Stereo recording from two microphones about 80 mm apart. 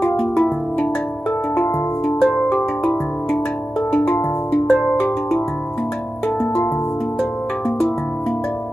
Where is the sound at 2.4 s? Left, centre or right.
Centre.